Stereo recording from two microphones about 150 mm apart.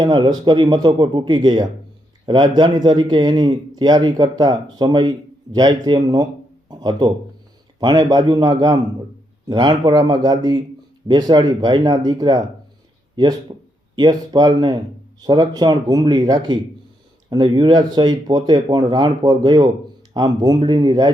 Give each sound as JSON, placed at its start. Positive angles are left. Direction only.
{"t": 0.0, "sound": "speech", "side_deg": -30}
{"t": 6.7, "sound": "a sound", "side_deg": -25}
{"t": 7.8, "sound": "speech", "side_deg": -30}
{"t": 13.5, "sound": "speech", "side_deg": -30}